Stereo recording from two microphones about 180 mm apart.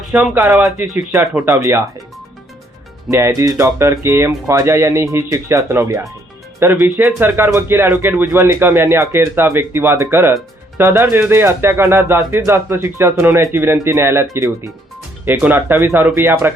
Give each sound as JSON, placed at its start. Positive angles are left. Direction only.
{"t": 0.1, "sound": "speech", "side_deg": -5}
{"t": 1.5, "sound": "speech", "side_deg": -15}
{"t": 3.1, "sound": "speech", "side_deg": -15}